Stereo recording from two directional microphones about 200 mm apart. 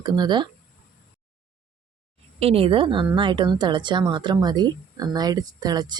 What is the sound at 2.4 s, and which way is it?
Speech, 30° right (ahead or behind).